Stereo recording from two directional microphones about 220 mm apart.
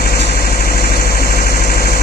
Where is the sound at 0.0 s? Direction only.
45° left (ahead or behind).